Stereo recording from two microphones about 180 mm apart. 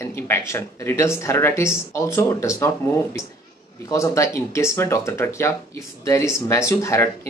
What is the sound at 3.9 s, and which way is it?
Speech, 15° left (ahead or behind).